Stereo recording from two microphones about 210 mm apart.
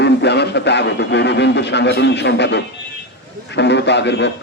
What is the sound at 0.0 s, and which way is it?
A man's voice, 55° left (ahead or behind).